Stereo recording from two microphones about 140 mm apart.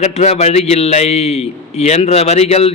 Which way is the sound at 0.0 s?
50° left (ahead or behind).